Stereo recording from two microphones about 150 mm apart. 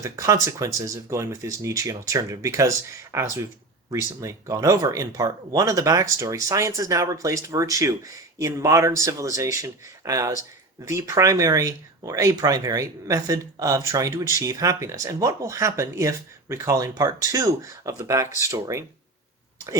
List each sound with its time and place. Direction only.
0.0 s speech: 20° right (ahead or behind)